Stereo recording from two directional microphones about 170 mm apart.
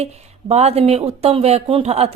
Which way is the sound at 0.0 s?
40° right (ahead or behind).